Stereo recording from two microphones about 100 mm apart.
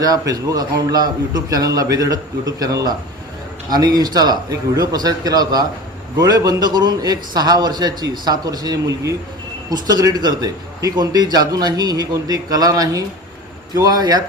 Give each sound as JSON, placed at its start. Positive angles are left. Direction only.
{"t": 0.0, "sound": "a man's voice", "side_deg": -40}